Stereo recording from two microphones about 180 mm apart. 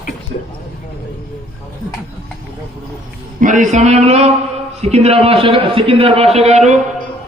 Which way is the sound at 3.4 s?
45° right (ahead or behind).